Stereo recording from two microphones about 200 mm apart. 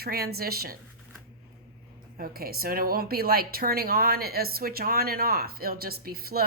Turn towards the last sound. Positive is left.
turn(degrees=-50)  # may be behind; listen again after turning